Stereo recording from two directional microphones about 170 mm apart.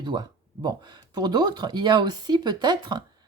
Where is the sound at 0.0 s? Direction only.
25° right (ahead or behind).